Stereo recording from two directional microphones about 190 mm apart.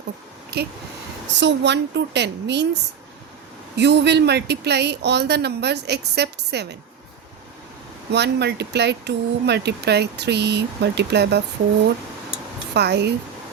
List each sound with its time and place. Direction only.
0.5 s a woman's voice: 60° right (ahead or behind)
3.8 s speech: 65° right (ahead or behind)
8.1 s speech: 60° right (ahead or behind)
12.7 s speech: 60° right (ahead or behind)